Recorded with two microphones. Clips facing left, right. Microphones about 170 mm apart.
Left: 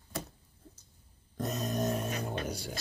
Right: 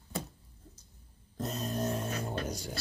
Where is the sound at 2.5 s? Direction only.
10° left (ahead or behind).